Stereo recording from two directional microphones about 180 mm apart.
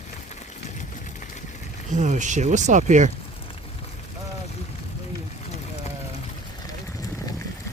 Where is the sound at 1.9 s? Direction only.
45° right (ahead or behind).